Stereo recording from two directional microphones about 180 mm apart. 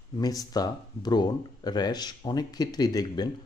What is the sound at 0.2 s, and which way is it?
Speech, 20° left (ahead or behind).